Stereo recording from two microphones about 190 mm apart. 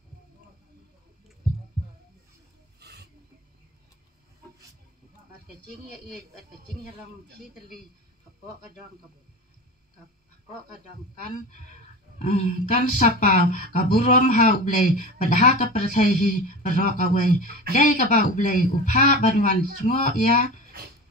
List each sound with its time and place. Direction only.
2.8 s snake: 60° right (ahead or behind)
12.2 s speech: 40° left (ahead or behind)